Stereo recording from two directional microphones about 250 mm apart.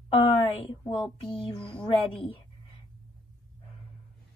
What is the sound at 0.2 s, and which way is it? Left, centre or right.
A woman's voice, centre.